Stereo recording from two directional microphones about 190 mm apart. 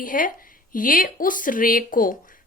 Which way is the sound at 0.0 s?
45° left (ahead or behind).